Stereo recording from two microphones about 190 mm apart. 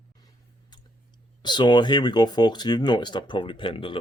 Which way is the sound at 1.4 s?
25° left (ahead or behind).